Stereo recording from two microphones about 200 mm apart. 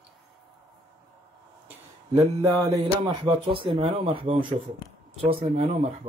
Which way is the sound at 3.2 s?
25° right (ahead or behind).